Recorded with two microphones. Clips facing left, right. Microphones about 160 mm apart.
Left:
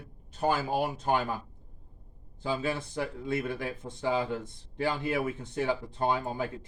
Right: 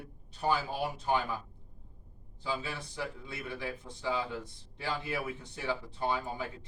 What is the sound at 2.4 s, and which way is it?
Speech, 50° left (ahead or behind).